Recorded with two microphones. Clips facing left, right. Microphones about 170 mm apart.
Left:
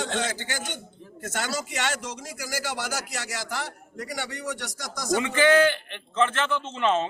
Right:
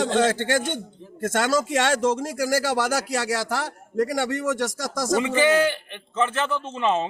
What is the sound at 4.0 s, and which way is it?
A man's voice, 50° right (ahead or behind).